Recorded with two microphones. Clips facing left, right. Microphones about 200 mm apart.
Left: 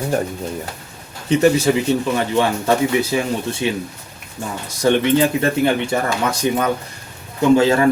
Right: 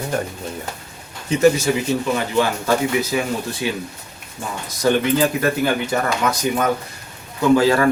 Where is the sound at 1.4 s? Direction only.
30° left (ahead or behind).